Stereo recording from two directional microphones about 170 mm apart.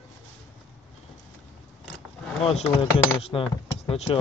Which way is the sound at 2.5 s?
35° left (ahead or behind).